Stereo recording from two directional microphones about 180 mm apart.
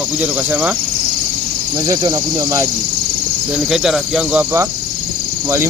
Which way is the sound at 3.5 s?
Centre (ahead or behind).